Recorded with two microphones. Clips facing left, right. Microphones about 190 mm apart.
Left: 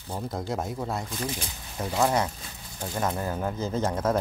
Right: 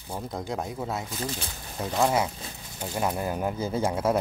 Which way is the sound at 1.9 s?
5° right (ahead or behind).